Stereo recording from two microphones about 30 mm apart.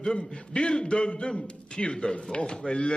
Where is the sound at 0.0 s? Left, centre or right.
Left.